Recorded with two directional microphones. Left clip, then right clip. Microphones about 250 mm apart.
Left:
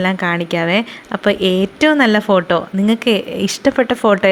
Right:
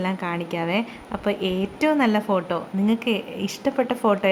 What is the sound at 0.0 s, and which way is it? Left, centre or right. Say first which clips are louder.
A woman's voice: left 10 dB; centre.